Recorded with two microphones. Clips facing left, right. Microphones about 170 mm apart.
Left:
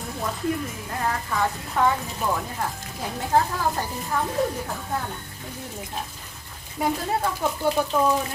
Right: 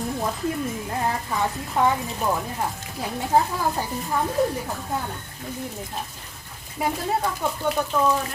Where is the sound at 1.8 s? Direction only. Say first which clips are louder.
Right 1 dB; 15° right (ahead or behind).